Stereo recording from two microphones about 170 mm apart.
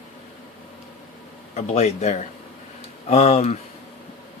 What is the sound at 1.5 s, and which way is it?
Speech, 40° left (ahead or behind).